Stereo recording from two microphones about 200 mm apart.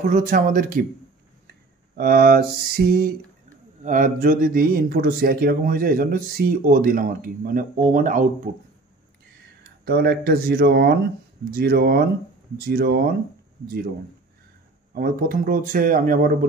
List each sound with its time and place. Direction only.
0.0 s speech: 40° right (ahead or behind)
1.5 s a sound: 50° right (ahead or behind)
3.8 s speech: 40° right (ahead or behind)
9.6 s speech: 55° right (ahead or behind)
15.0 s speech: 45° right (ahead or behind)